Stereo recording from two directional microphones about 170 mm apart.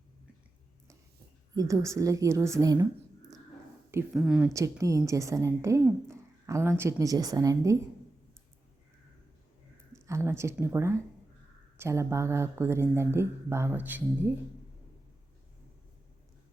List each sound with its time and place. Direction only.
1.5 s a woman's voice: 20° right (ahead or behind)
4.1 s speech: 5° right (ahead or behind)
4.5 s a woman's voice: 20° right (ahead or behind)
10.1 s a woman's voice: 15° right (ahead or behind)